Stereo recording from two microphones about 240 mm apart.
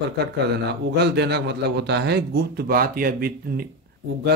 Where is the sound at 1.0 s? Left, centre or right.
Right.